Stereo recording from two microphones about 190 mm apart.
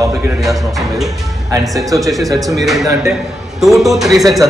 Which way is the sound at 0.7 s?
Centre (ahead or behind).